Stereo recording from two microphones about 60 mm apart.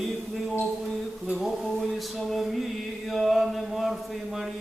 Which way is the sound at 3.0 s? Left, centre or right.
Centre.